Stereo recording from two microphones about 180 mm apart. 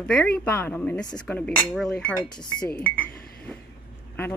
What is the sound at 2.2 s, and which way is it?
Speech, 25° left (ahead or behind).